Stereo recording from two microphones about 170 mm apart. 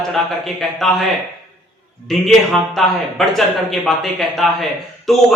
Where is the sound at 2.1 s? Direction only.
Centre (ahead or behind).